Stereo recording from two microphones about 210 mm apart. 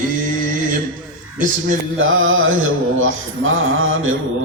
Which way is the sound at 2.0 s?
70° right (ahead or behind).